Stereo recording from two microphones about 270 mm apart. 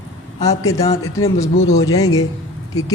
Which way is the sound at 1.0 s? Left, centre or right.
Left.